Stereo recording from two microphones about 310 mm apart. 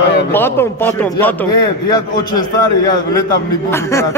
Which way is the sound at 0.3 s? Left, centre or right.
Centre.